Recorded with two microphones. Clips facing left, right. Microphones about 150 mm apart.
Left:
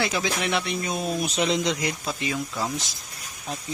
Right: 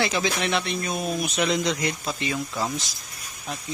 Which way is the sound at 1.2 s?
30° left (ahead or behind).